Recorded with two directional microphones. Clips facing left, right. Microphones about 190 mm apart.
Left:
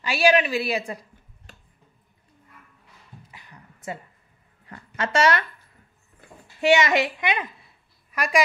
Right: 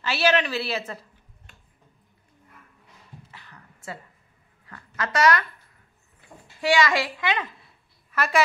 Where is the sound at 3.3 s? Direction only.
15° left (ahead or behind).